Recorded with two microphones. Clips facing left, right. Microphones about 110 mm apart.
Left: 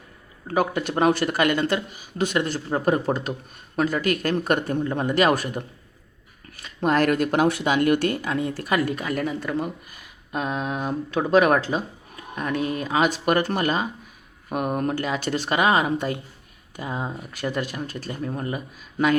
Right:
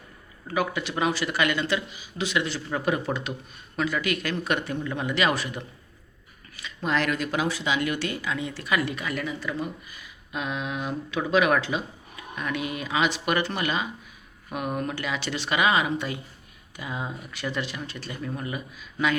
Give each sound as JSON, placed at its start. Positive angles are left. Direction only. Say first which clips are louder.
{"t": 0.4, "sound": "speech", "louder": "left 4 dB", "side_deg": 45}